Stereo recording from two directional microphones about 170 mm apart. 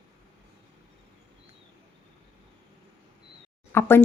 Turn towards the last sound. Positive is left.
turn(degrees=15)  # may be behind; listen again after turning